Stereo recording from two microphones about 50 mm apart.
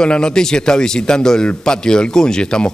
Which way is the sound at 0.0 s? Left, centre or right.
Centre.